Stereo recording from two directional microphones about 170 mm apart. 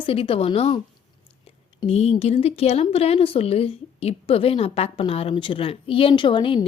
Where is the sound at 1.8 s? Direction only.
35° left (ahead or behind).